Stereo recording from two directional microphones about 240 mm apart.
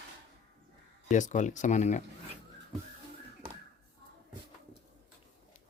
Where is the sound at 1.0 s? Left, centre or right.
Left.